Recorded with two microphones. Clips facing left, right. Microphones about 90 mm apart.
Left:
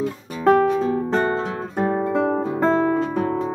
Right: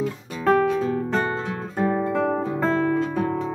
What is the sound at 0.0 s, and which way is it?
Music, 15° left (ahead or behind).